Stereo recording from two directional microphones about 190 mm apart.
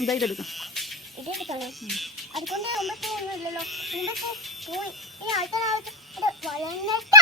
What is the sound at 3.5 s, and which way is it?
Speech, centre (ahead or behind).